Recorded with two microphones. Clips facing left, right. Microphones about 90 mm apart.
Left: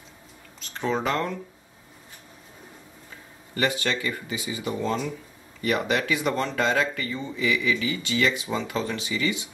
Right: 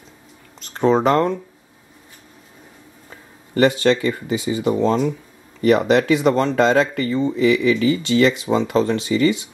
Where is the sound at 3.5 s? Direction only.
35° right (ahead or behind).